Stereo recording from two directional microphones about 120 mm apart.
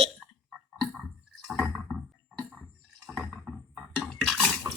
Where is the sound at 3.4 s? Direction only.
5° right (ahead or behind).